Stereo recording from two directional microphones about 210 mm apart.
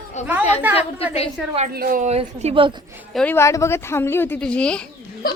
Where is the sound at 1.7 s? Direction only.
40° right (ahead or behind).